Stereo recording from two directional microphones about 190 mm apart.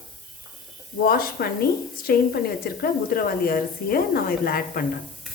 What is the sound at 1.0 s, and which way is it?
A woman's voice, 55° left (ahead or behind).